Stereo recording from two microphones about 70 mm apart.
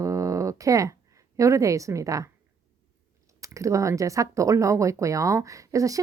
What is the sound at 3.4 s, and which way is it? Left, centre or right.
Speech, right.